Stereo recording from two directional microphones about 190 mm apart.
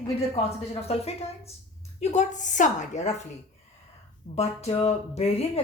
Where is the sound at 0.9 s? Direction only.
30° left (ahead or behind).